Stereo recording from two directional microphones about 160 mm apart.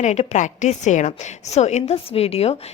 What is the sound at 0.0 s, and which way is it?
A woman's voice, 45° left (ahead or behind).